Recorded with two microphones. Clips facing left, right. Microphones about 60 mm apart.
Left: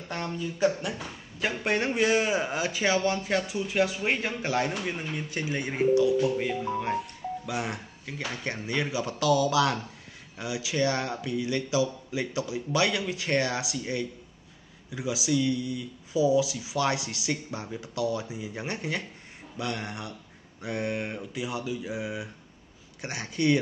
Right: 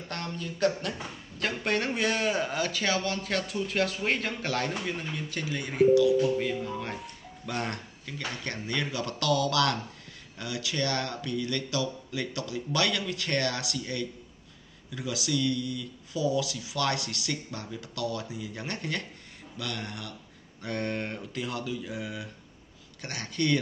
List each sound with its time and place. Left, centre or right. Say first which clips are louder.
0.1 s speech: left 4 dB; centre; by 5.9 s left
6.1 s speech: even; centre
7.0 s speech: left 10 dB; centre; by 20.2 s left
20.6 s speech: left 1 dB; centre